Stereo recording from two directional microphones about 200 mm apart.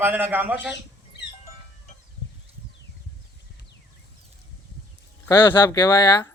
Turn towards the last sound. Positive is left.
turn(degrees=20)  # may be behind; listen again after turning